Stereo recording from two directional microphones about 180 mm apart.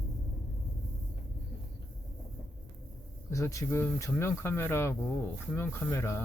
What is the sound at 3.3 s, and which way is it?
Speech, 15° left (ahead or behind).